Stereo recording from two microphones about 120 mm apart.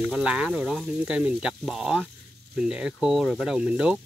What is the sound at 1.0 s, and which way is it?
Speech, 10° right (ahead or behind).